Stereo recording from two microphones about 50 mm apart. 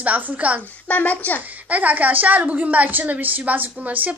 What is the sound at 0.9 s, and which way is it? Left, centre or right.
Speech, left.